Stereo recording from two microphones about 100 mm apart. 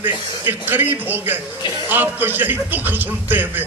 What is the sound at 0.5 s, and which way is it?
A man's voice, 20° right (ahead or behind).